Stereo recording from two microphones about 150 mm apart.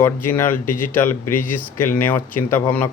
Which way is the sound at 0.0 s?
15° left (ahead or behind).